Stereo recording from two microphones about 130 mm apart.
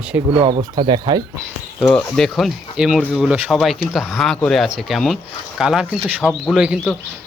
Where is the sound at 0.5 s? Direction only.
35° right (ahead or behind).